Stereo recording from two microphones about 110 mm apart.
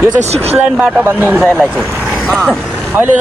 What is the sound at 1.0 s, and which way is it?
Speech, 20° right (ahead or behind).